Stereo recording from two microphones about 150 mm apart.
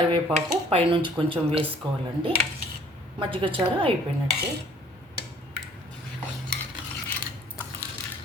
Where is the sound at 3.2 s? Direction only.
35° right (ahead or behind).